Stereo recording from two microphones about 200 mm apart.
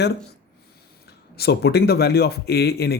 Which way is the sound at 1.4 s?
50° left (ahead or behind).